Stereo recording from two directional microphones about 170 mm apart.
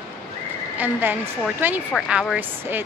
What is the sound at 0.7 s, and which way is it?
Speech, 10° right (ahead or behind).